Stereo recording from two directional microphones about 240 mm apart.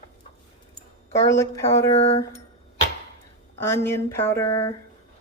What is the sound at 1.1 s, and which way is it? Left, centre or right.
Speech, centre.